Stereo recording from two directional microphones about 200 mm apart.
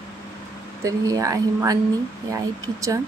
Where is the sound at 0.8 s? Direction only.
15° right (ahead or behind).